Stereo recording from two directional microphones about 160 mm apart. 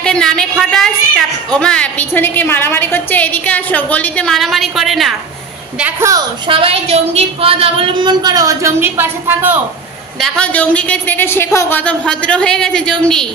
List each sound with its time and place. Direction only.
0.0 s a woman's voice: 5° left (ahead or behind)
5.8 s a woman's voice: 15° right (ahead or behind)
6.4 s a woman's voice: 35° right (ahead or behind); by 9.6 s 15° right (ahead or behind)
10.2 s a woman's voice: 5° left (ahead or behind)